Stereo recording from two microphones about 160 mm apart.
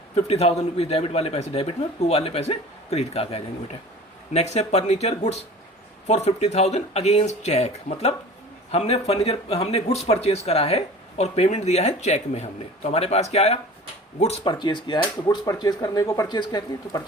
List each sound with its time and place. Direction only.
0.3 s speech: 40° left (ahead or behind)
14.4 s speech: 30° left (ahead or behind)